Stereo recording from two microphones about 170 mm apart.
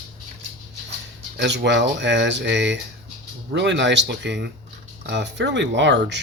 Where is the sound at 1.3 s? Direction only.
85° right.